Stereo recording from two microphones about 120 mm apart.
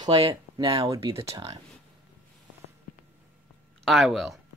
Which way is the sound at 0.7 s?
30° right (ahead or behind).